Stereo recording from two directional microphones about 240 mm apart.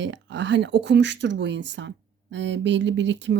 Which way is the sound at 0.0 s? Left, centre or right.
Right.